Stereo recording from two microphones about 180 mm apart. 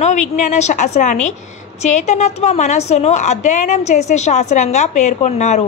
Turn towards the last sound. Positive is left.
turn(degrees=40)  # may be behind; listen again after turning